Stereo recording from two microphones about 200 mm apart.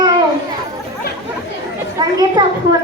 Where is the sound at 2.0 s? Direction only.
20° right (ahead or behind).